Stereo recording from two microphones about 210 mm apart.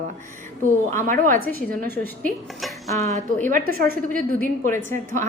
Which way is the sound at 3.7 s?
45° right (ahead or behind).